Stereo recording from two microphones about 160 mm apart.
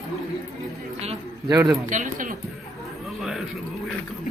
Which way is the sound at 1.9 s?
55° right (ahead or behind).